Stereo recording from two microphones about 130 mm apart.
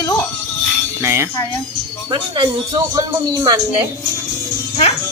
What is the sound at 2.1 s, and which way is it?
Speech, 35° right (ahead or behind).